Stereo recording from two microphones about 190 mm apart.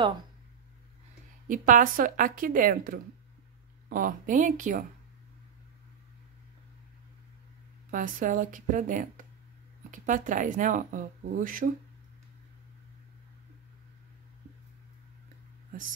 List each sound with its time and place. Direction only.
1.5 s speech: 45° right (ahead or behind)
7.9 s speech: 45° right (ahead or behind)